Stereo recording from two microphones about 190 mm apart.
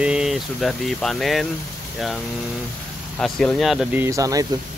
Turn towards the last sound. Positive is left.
turn(degrees=-15)  # may be behind; listen again after turning